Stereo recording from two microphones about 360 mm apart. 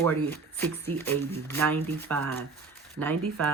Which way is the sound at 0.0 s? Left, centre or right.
Centre.